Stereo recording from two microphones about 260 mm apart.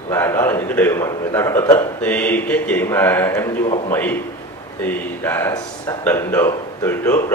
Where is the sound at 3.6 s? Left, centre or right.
Left.